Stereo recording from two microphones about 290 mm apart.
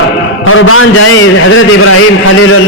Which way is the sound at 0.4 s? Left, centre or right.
Left.